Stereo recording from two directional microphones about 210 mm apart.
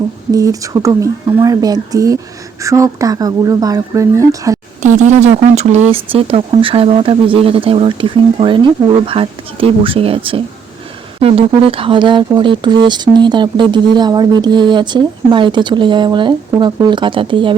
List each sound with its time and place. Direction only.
0.3 s speech: 15° right (ahead or behind)
4.8 s speech: 35° right (ahead or behind)